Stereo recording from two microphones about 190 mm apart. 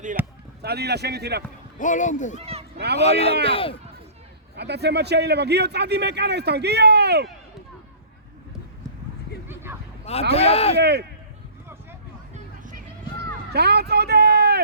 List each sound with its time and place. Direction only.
0.2 s a sound: 10° right (ahead or behind)
0.6 s a man's voice: 60° right (ahead or behind)
1.8 s speech: 40° left (ahead or behind)
2.4 s a sound: 30° right (ahead or behind)
2.7 s speech: 60° right (ahead or behind)
3.0 s speech: 35° left (ahead or behind)
4.5 s a man's voice: 60° right (ahead or behind)
9.5 s a sound: 10° right (ahead or behind)
10.1 s speech: 35° left (ahead or behind)
10.8 s a man's voice: 60° right (ahead or behind)
12.3 s a sound: 45° right (ahead or behind)
13.5 s speech: 60° right (ahead or behind)